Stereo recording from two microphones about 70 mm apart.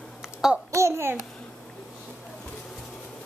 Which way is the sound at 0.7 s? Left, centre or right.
Right.